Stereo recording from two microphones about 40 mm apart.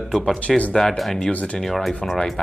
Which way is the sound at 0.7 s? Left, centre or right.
Centre.